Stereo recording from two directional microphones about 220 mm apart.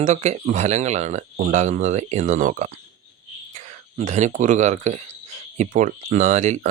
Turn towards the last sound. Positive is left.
turn(degrees=-30)  # may be behind; listen again after turning